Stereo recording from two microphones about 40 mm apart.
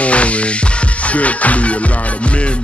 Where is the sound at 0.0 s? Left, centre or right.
Left.